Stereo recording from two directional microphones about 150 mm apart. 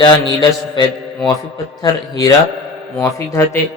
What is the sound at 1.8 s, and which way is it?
A man's voice, 25° left (ahead or behind).